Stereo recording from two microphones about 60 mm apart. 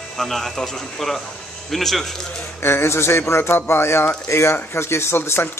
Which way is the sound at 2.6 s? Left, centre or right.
Left.